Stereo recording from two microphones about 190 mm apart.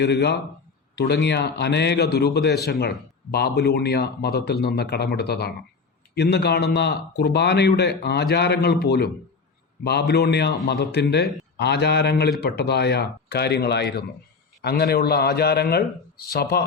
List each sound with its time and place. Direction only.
0.0 s a man's voice: 60° left (ahead or behind)